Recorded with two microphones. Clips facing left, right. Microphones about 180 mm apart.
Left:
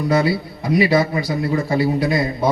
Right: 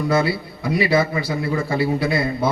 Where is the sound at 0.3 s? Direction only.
40° left (ahead or behind).